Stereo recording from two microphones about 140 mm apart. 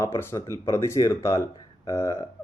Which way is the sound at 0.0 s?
20° left (ahead or behind).